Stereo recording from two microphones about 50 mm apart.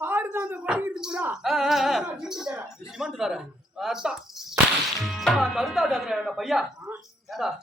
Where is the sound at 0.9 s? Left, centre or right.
Centre.